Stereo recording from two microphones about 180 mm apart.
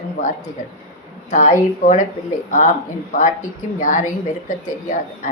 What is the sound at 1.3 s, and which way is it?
A woman's voice, 45° left (ahead or behind).